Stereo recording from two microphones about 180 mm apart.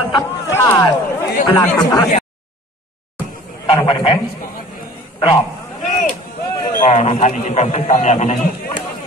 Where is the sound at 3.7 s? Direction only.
25° left (ahead or behind).